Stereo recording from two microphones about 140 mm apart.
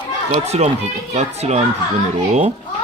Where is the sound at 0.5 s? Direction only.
50° right (ahead or behind).